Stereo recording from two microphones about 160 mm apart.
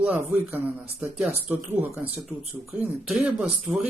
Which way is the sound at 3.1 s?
5° right (ahead or behind).